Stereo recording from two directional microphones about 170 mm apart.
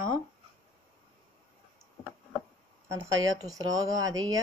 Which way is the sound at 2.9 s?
20° right (ahead or behind).